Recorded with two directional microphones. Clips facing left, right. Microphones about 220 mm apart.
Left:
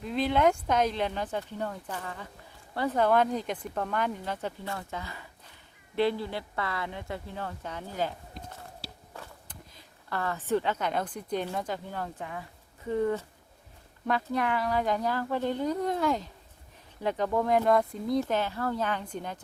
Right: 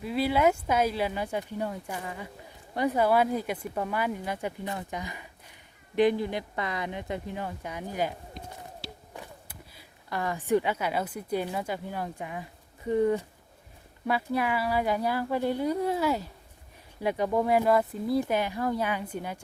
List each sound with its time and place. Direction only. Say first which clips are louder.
0.0 s speech: right 1 dB; 5° right (ahead or behind)
9.1 s speech: right 2 dB; 10° right (ahead or behind)